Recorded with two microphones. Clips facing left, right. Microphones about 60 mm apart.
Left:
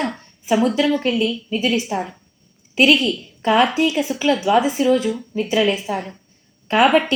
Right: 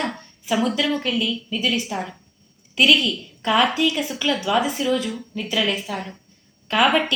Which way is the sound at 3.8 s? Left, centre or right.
Centre.